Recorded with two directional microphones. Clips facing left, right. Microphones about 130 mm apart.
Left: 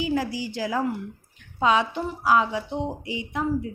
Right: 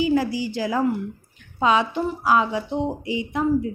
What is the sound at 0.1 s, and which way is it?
Speech, 25° right (ahead or behind).